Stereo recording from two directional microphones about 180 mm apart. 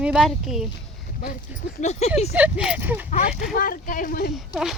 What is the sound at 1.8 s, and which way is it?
Speech, 35° left (ahead or behind).